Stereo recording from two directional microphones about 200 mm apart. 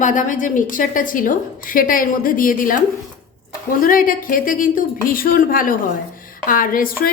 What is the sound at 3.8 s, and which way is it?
A woman's voice, 45° left (ahead or behind).